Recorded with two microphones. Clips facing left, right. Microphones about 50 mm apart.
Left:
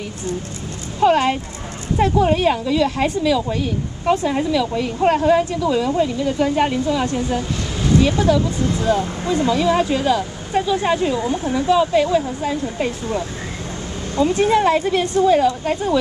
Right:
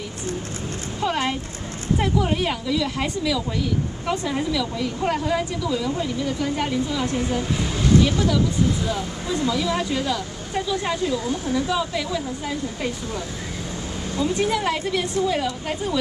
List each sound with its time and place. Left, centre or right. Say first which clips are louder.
1.0 s a woman's voice: left 9 dB; left
4.3 s speech: left 5 dB; left
5.9 s speech: left 7 dB; left
8.1 s speech: left 5 dB; left
8.7 s a woman's voice: left 7 dB; left
9.4 s speech: left 7 dB; left
11.6 s speech: left 9 dB; left